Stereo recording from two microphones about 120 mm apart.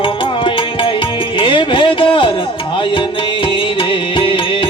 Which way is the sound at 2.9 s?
45° left (ahead or behind).